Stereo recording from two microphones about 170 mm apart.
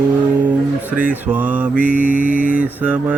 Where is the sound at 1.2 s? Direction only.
10° right (ahead or behind).